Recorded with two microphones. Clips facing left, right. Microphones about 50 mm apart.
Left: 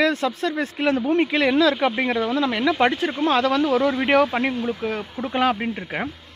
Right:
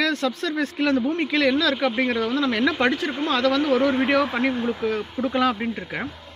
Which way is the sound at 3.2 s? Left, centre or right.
Left.